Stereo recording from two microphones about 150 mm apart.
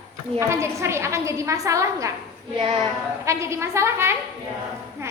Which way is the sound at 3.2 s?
20° right (ahead or behind).